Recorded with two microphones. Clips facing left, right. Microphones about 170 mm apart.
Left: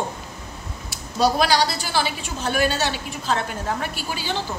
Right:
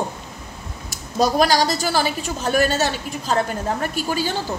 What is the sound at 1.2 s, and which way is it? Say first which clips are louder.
A woman's voice: right 2 dB; 45° right (ahead or behind).